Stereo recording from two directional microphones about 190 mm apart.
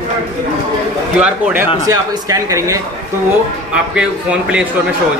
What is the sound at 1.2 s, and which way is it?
Speech, 5° right (ahead or behind).